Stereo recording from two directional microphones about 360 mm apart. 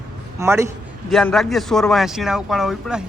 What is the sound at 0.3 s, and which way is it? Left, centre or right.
A man's voice, centre.